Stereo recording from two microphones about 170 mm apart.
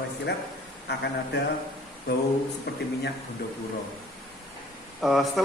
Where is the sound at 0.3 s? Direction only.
75° left (ahead or behind).